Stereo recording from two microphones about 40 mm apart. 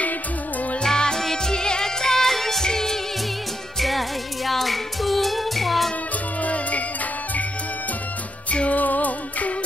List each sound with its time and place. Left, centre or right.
0.8 s music: centre
4.5 s music: centre
6.4 s music: left
8.5 s music: left